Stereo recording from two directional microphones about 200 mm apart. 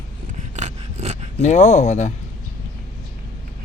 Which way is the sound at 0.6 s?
35° right (ahead or behind).